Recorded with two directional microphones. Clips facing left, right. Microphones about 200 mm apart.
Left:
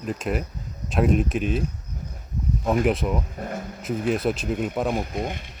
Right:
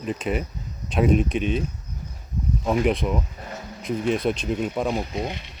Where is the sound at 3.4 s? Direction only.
50° left (ahead or behind).